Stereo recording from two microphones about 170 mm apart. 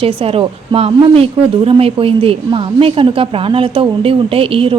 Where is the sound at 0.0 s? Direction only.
35° right (ahead or behind).